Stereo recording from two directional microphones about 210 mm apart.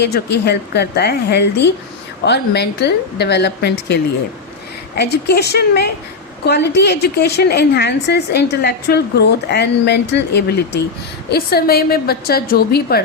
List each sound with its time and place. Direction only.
0.0 s a woman's voice: 50° left (ahead or behind)